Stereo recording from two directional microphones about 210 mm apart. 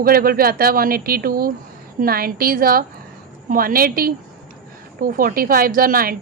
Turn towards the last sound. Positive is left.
turn(degrees=-45)  # may be behind; listen again after turning